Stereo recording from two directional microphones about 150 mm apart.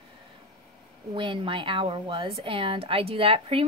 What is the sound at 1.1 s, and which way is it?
A woman's voice, 35° right (ahead or behind).